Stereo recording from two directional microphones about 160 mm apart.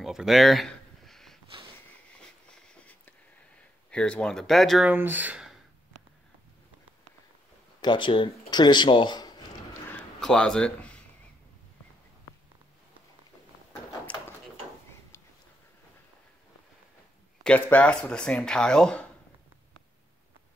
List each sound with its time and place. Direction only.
0.0 s a sound: centre (ahead or behind)
3.9 s speech: 5° left (ahead or behind)
4.9 s speech: 10° right (ahead or behind)
7.8 s speech: 30° left (ahead or behind)
10.2 s speech: 5° left (ahead or behind)
17.4 s speech: 10° left (ahead or behind)